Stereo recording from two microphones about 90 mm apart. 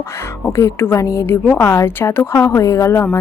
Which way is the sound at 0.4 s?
30° left (ahead or behind).